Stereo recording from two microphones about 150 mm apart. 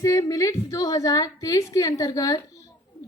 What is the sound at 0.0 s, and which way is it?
A woman's voice, 20° left (ahead or behind).